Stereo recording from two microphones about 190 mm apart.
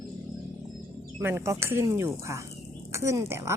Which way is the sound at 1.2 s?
15° right (ahead or behind).